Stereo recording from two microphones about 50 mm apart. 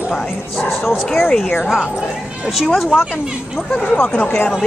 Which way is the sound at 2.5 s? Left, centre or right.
Centre.